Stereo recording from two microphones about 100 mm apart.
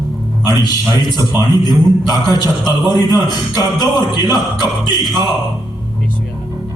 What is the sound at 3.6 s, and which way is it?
Music, 40° left (ahead or behind).